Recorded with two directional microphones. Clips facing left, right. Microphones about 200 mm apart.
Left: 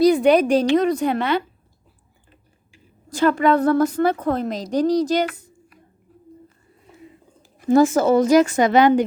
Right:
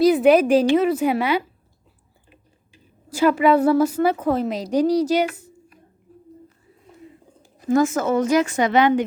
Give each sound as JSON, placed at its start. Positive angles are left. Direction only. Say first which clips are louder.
{"t": 0.0, "sound": "a woman's voice", "louder": "even", "side_deg": -5}
{"t": 7.7, "sound": "speech", "louder": "left 4 dB", "side_deg": 30}